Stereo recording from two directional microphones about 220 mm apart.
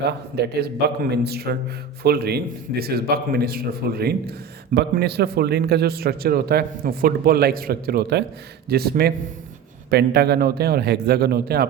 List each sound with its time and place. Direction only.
0.0 s a man's voice: 50° right (ahead or behind)